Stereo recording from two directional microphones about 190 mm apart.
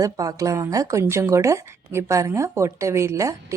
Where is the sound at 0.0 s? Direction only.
20° right (ahead or behind).